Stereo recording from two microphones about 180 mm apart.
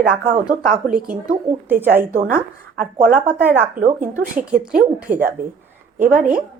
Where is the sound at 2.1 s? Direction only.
45° right (ahead or behind).